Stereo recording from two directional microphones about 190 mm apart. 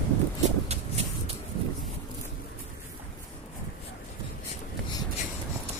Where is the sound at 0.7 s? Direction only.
35° right (ahead or behind).